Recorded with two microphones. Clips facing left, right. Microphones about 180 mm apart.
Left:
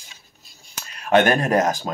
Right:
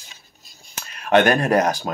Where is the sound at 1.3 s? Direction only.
25° left (ahead or behind).